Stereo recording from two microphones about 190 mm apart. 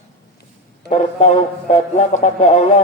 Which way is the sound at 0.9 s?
35° left (ahead or behind).